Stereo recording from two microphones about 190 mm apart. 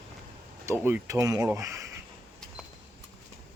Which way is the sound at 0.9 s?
10° right (ahead or behind).